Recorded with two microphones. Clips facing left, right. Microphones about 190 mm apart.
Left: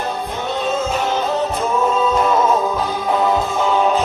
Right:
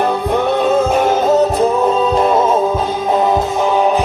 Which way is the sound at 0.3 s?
60° right (ahead or behind).